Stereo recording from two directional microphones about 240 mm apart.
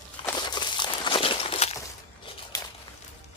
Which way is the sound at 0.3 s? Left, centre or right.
Centre.